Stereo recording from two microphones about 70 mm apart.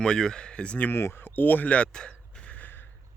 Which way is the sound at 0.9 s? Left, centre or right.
Left.